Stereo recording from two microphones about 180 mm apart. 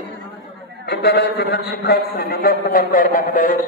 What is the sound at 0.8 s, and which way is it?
A man's voice, 65° left (ahead or behind).